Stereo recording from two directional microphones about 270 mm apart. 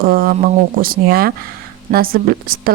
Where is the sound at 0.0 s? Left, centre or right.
Right.